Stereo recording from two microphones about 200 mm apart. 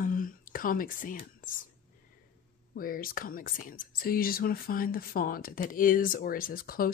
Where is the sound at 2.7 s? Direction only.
45° left (ahead or behind).